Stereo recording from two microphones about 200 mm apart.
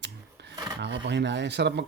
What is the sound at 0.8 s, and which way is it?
Speech, 60° right (ahead or behind).